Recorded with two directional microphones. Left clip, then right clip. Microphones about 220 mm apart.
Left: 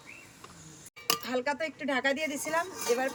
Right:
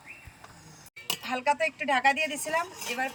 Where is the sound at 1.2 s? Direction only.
5° right (ahead or behind).